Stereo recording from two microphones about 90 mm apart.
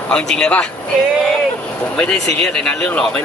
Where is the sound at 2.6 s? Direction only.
10° left (ahead or behind).